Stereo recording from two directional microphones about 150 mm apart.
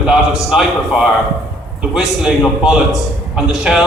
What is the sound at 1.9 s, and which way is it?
A man's voice, 5° right (ahead or behind).